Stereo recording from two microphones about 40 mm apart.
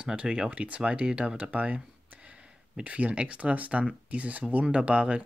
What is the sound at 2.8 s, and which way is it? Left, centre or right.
Speech, right.